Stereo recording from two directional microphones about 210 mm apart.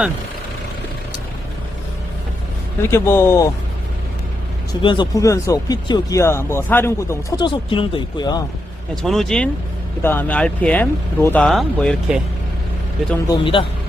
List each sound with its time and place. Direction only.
2.8 s speech: 10° left (ahead or behind)
4.7 s speech: 20° left (ahead or behind)
9.0 s speech: centre (ahead or behind)
13.2 s a man's voice: 20° left (ahead or behind)